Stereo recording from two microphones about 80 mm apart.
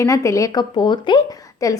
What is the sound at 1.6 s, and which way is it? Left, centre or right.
Speech, left.